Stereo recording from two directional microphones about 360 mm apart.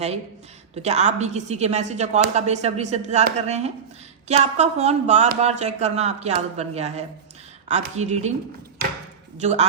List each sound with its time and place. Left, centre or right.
0.8 s a woman's voice: centre
9.4 s a woman's voice: centre